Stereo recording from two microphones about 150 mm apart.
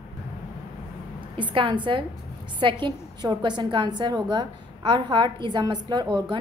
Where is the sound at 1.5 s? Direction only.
35° right (ahead or behind).